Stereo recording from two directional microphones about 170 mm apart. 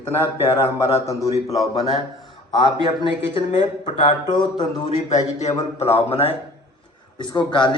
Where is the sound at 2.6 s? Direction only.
30° left (ahead or behind).